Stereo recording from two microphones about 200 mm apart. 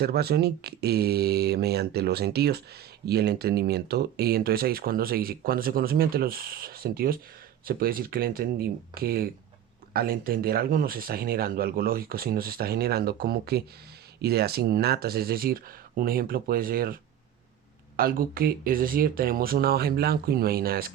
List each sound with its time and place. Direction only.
0.0 s speech: 50° right (ahead or behind)